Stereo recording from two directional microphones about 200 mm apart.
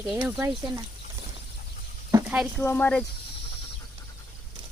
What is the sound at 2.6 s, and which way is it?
Speech, 10° left (ahead or behind).